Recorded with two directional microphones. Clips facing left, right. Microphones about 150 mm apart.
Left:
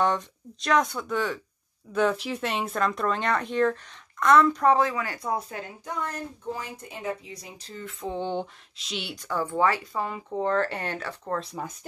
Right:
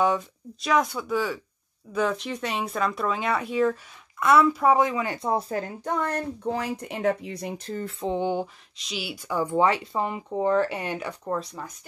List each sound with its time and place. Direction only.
0.0 s speech: 5° right (ahead or behind); by 5.4 s 25° right (ahead or behind)
5.9 s speech: 65° right (ahead or behind)
7.8 s speech: 30° right (ahead or behind)
8.1 s speech: 10° right (ahead or behind)
8.7 s speech: centre (ahead or behind)
11.6 s speech: 15° left (ahead or behind)